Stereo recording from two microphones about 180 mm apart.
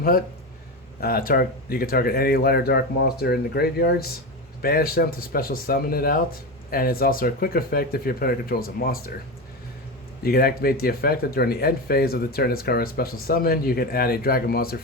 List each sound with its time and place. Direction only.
1.0 s speech: 55° left (ahead or behind)
10.2 s speech: 60° left (ahead or behind)